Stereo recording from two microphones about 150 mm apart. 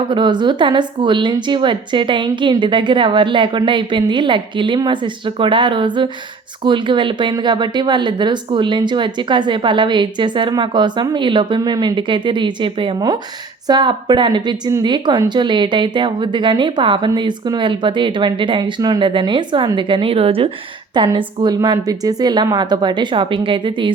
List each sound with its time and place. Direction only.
0.1 s a woman's voice: 30° right (ahead or behind)